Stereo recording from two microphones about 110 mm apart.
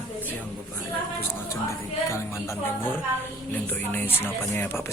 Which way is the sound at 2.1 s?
25° left (ahead or behind).